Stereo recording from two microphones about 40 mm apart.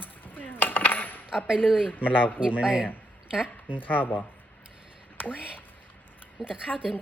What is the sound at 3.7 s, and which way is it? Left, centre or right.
Speech, left.